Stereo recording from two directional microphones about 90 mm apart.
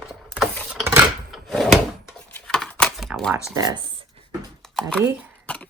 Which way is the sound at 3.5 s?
50° right (ahead or behind).